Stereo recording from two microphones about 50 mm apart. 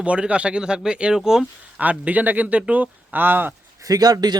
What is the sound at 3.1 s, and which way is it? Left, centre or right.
Speech, right.